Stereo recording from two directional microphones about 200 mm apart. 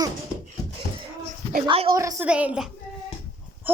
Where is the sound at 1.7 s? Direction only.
25° right (ahead or behind).